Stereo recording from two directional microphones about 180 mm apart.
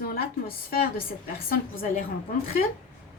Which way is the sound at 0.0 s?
55° left (ahead or behind).